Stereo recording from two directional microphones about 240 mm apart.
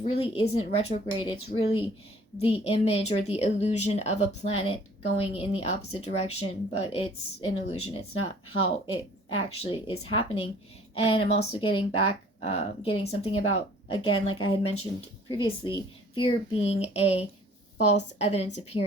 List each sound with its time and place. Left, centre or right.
0.0 s speech: left